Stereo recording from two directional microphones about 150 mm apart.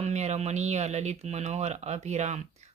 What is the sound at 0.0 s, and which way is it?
Speech, 50° right (ahead or behind).